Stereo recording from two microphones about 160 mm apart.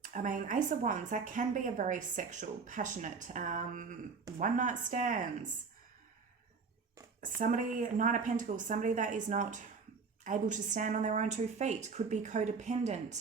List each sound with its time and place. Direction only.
0.0 s speech: 55° right (ahead or behind)
7.2 s speech: 55° right (ahead or behind)